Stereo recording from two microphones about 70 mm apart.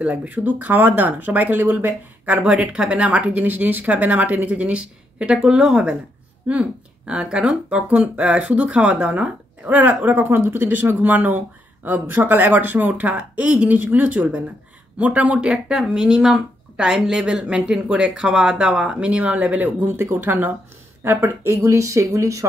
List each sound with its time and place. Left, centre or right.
0.0 s speech: right
20.0 s speech: right